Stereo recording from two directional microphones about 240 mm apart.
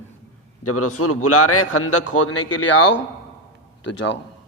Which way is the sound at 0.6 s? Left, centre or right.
Left.